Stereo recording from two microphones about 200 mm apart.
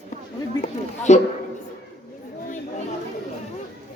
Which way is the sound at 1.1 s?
35° left (ahead or behind).